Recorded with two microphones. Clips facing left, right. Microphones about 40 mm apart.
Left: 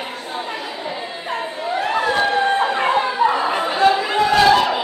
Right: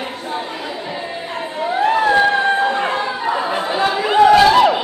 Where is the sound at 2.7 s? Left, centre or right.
Centre.